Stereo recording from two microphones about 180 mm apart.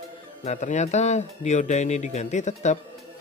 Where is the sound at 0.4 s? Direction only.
40° left (ahead or behind).